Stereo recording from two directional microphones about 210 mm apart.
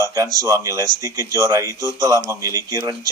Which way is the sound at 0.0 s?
15° right (ahead or behind).